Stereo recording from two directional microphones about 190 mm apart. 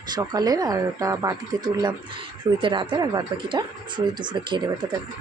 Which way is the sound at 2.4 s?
25° right (ahead or behind).